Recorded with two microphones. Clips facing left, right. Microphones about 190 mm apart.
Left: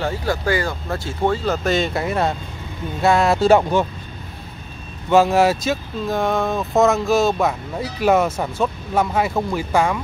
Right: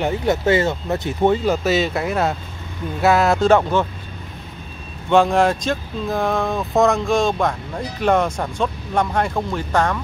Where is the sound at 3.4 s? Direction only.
10° left (ahead or behind).